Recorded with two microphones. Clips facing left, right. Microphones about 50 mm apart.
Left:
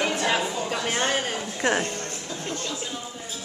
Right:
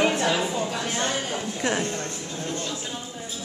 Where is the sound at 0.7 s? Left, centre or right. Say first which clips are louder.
Left 2 dB; left.